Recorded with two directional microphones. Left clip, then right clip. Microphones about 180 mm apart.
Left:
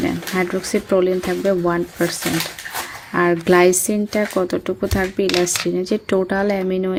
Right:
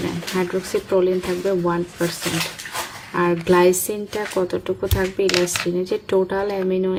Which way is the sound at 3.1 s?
40° left (ahead or behind).